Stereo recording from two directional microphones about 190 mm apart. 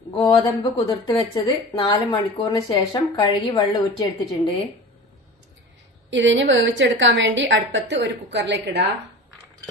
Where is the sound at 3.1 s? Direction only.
25° left (ahead or behind).